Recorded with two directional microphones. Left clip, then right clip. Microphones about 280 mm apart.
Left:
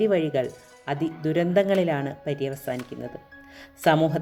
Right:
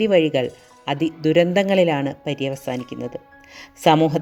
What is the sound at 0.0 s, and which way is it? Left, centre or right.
Speech, centre.